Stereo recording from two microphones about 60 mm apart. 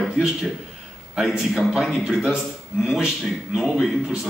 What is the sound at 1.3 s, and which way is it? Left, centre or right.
Speech, centre.